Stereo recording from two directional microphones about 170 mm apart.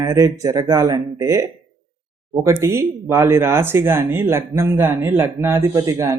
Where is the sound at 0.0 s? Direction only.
20° right (ahead or behind).